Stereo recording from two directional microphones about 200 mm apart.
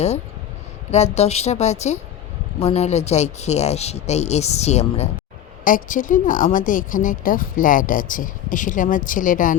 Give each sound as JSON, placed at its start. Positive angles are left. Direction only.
{"t": 0.9, "sound": "speech", "side_deg": 35}